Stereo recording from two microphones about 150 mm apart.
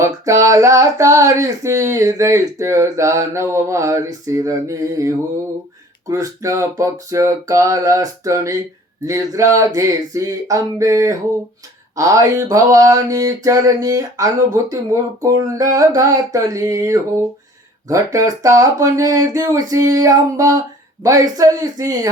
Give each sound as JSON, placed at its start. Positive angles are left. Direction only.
{"t": 0.0, "sound": "female singing", "side_deg": -20}